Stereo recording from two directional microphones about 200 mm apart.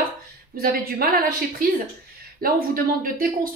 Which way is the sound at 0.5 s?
50° right (ahead or behind).